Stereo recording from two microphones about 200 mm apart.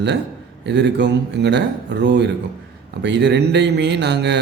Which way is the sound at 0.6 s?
60° right (ahead or behind).